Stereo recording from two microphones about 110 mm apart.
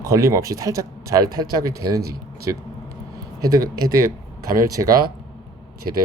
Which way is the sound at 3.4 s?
35° right (ahead or behind).